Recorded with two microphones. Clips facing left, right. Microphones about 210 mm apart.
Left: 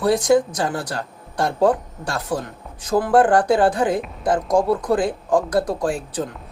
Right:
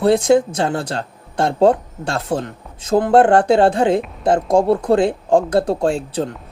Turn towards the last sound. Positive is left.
turn(degrees=-25)  # may be behind; listen again after turning